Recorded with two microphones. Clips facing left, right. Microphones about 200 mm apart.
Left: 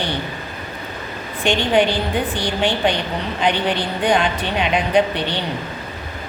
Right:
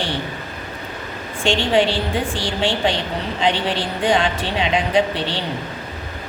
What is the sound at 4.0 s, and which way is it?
Speech, 25° right (ahead or behind).